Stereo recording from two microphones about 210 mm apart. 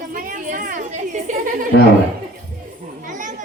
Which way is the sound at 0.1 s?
40° right (ahead or behind).